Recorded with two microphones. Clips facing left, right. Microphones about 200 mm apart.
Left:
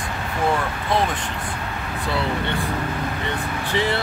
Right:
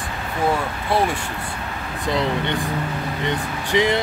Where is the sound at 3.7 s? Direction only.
15° right (ahead or behind).